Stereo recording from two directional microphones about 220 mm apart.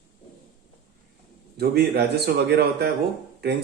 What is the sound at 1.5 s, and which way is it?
Speech, 45° right (ahead or behind).